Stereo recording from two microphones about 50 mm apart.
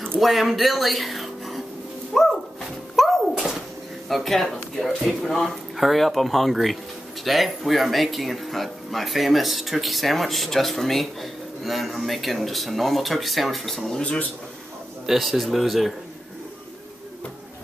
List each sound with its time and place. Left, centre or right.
0.2 s speech: centre
2.1 s bird: centre
3.0 s a sound: centre
4.1 s speech: centre
15.0 s speech: centre